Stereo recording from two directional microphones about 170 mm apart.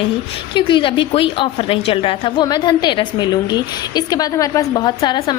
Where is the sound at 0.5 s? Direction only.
30° left (ahead or behind).